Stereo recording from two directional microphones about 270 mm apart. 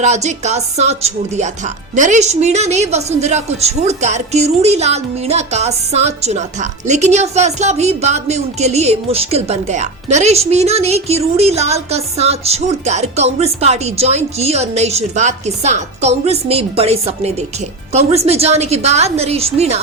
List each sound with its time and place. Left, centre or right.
0.0 s speech: right